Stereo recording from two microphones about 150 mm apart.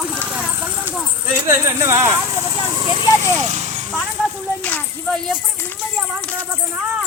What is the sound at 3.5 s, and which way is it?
Vehicle, 45° right (ahead or behind).